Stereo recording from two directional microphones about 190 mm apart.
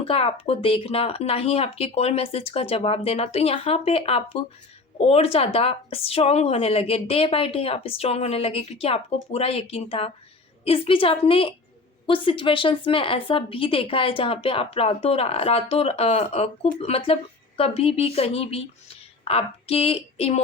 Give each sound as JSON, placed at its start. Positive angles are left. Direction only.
{"t": 0.0, "sound": "a woman's voice", "side_deg": 30}